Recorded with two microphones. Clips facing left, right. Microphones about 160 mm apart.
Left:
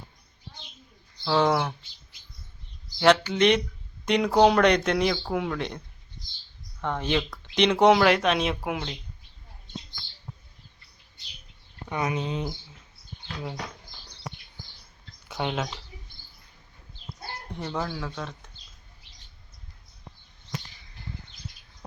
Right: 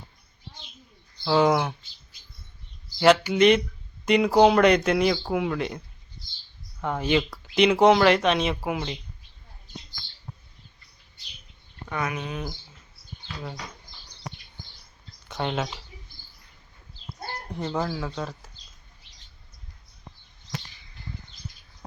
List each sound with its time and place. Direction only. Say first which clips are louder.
1.2 s speech: right 2 dB; 5° right (ahead or behind)
3.0 s speech: right 2 dB; 5° right (ahead or behind)
6.8 s speech: right 3 dB; 5° right (ahead or behind)
11.9 s speech: left 2 dB; 20° left (ahead or behind)
15.3 s speech: right 1 dB; 5° left (ahead or behind)
17.6 s speech: right 3 dB; 15° right (ahead or behind)
17.8 s speech: right 3 dB; 5° right (ahead or behind)